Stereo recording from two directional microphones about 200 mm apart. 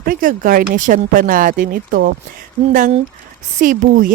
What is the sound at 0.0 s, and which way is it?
Speech, 45° right (ahead or behind).